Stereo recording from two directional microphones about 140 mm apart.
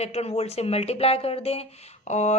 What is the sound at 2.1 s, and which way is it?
Speech, 55° left (ahead or behind).